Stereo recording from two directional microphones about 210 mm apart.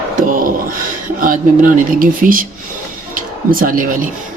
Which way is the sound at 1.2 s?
40° right (ahead or behind).